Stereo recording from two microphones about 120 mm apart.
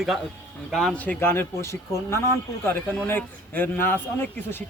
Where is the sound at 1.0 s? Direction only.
15° left (ahead or behind).